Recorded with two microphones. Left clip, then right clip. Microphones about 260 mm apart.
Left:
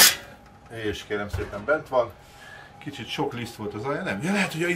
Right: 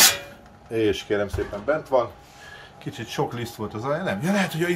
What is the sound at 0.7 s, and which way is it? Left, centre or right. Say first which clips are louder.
Speech: right 7 dB; right.